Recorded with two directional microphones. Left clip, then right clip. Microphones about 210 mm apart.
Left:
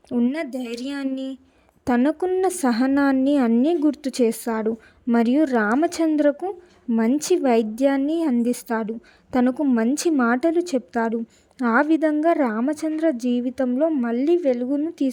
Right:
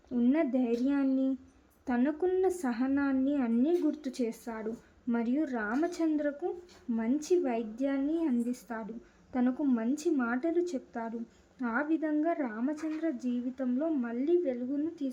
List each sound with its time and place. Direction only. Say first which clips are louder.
0.1 s a woman's voice: left 4 dB; 35° left (ahead or behind)